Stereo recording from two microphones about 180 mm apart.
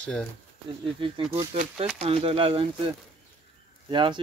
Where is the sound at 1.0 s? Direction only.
30° right (ahead or behind).